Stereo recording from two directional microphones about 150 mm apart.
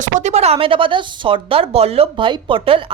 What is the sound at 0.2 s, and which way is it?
Speech, 50° right (ahead or behind).